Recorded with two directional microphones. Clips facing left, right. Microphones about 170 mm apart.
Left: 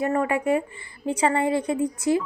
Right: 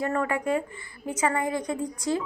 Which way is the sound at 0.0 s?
20° left (ahead or behind).